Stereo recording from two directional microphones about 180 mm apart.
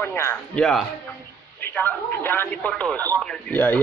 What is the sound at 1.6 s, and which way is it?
Speech, 10° left (ahead or behind).